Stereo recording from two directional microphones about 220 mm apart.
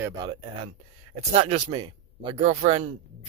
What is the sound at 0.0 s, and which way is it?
Speech, 20° right (ahead or behind).